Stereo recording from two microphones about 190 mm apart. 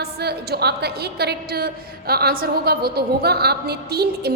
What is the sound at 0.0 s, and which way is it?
A woman's voice, 55° right (ahead or behind).